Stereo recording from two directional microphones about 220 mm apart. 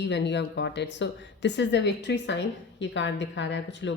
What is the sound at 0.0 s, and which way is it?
Speech, 50° left (ahead or behind).